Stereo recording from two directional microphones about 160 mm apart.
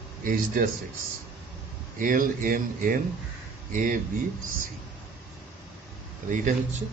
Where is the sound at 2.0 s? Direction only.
55° right (ahead or behind).